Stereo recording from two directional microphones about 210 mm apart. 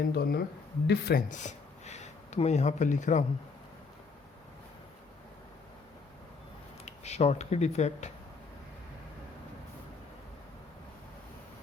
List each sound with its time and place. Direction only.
0.1 s speech: 50° left (ahead or behind)
1.3 s a sound: 35° left (ahead or behind)
6.8 s speech: 30° left (ahead or behind)